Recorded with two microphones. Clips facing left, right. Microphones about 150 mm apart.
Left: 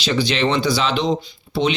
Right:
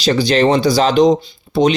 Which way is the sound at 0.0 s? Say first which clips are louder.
Right 6 dB; 40° right (ahead or behind).